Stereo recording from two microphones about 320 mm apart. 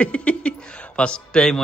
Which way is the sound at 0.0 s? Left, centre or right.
Centre.